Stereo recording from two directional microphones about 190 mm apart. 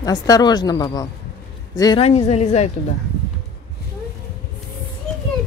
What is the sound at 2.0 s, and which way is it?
Speech, 35° left (ahead or behind).